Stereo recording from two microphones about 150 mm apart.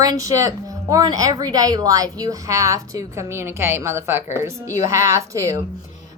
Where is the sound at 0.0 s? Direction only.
20° right (ahead or behind).